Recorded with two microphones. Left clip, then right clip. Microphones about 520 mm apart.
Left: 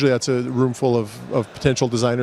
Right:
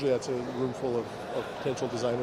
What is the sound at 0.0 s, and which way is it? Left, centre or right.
Speech, left.